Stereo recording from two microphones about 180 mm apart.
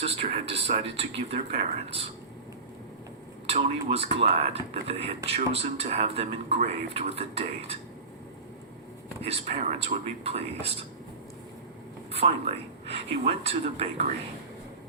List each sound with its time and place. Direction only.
0.0 s speech: 30° right (ahead or behind)
3.5 s speech: 35° right (ahead or behind)
9.2 s speech: 35° right (ahead or behind)
12.1 s speech: 35° right (ahead or behind)